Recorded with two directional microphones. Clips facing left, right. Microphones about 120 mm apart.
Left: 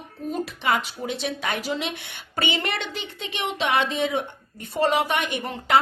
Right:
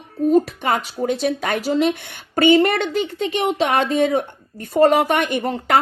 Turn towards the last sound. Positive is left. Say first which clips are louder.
# right 6 dB
turn(degrees=-45)  # may be behind; listen again after turning